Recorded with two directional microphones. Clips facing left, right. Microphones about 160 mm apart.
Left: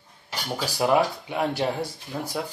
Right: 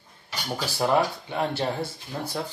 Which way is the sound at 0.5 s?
10° left (ahead or behind).